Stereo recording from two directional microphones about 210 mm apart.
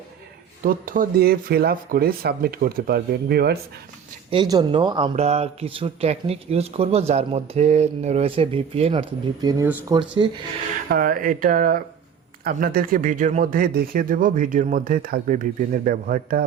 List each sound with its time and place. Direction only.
0.6 s speech: 40° right (ahead or behind)
4.3 s speech: 20° right (ahead or behind)
10.8 s speech: 45° right (ahead or behind)